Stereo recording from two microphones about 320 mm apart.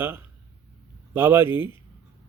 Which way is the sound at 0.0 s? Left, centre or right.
Centre.